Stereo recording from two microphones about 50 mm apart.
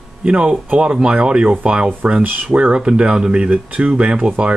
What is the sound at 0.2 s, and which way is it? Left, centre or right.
Speech, right.